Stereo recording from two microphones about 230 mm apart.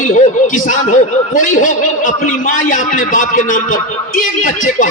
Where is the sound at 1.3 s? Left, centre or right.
Left.